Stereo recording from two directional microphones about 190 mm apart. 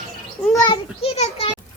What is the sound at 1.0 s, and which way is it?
Speech, 30° left (ahead or behind).